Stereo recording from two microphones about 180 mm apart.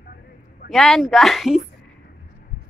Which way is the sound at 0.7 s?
Centre (ahead or behind).